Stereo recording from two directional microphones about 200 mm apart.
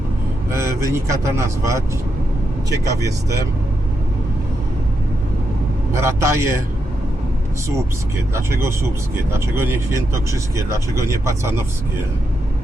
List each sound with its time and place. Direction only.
0.5 s speech: 15° right (ahead or behind)
5.9 s speech: 15° right (ahead or behind)
8.3 s speech: 15° right (ahead or behind)